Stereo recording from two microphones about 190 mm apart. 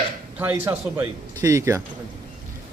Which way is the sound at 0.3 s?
10° right (ahead or behind).